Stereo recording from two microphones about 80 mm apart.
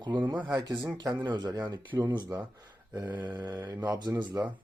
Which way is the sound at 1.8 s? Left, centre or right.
Right.